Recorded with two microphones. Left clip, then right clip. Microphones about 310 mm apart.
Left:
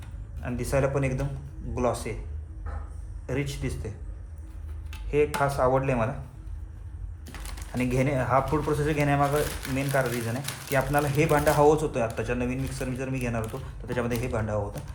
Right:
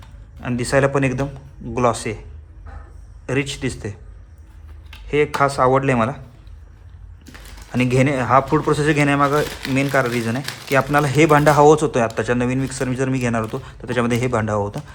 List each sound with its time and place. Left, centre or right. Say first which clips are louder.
0.4 s speech: right 9 dB; right
3.2 s speech: right 9 dB; right
5.0 s speech: right 7 dB; right
7.8 s speech: right 8 dB; right